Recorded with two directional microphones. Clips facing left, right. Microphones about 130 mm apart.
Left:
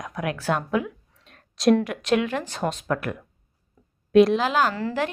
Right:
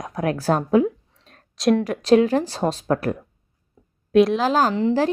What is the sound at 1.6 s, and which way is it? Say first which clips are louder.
Speech: even; centre (ahead or behind).